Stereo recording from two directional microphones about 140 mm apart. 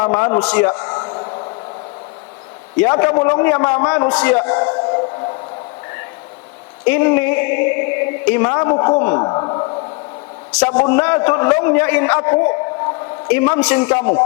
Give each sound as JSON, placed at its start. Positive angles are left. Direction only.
{"t": 0.0, "sound": "a man's voice", "side_deg": 20}
{"t": 0.4, "sound": "a man's voice", "side_deg": 15}
{"t": 0.7, "sound": "a sound", "side_deg": 25}
{"t": 2.8, "sound": "a man's voice", "side_deg": 20}
{"t": 3.8, "sound": "a man's voice", "side_deg": 30}
{"t": 4.2, "sound": "a man's voice", "side_deg": 15}
{"t": 4.4, "sound": "speech", "side_deg": 25}
{"t": 6.8, "sound": "speech", "side_deg": 15}
{"t": 10.7, "sound": "a man's voice", "side_deg": 20}